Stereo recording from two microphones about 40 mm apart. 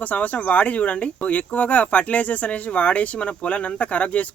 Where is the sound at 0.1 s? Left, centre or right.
Left.